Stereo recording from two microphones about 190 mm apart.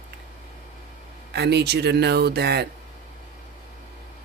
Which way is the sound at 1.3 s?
60° right (ahead or behind).